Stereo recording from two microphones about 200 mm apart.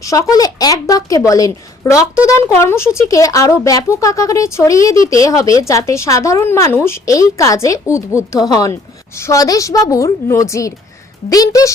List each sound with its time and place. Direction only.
0.0 s speech: 15° left (ahead or behind)